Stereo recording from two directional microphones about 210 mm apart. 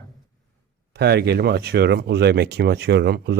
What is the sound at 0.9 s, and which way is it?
Speech, 50° right (ahead or behind).